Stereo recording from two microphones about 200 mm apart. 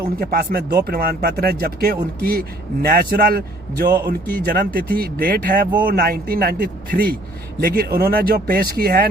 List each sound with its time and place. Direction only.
0.2 s speech: 50° right (ahead or behind)